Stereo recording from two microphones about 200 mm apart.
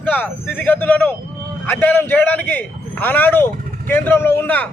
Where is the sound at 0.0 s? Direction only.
10° left (ahead or behind).